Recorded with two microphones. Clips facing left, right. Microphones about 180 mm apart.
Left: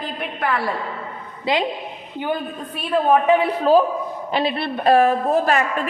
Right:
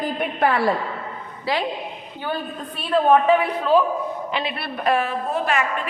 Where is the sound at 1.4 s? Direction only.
20° left (ahead or behind).